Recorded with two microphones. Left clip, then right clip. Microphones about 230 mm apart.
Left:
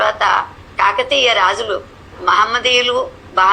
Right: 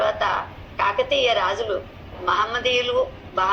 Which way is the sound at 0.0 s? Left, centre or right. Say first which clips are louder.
Left 8 dB; left.